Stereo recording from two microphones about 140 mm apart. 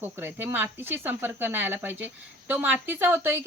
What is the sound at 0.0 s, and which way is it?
Speech, 15° right (ahead or behind).